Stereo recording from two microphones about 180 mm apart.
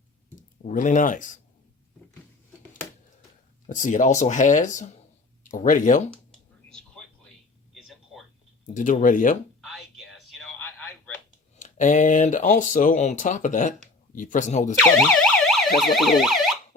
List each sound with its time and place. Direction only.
0.6 s speech: 45° left (ahead or behind)
3.7 s speech: 45° left (ahead or behind)
6.7 s a sound: 5° left (ahead or behind)
8.7 s speech: 45° left (ahead or behind)
9.6 s a sound: centre (ahead or behind)
11.5 s speech: 45° left (ahead or behind)
14.8 s emergency vehicle: 5° left (ahead or behind)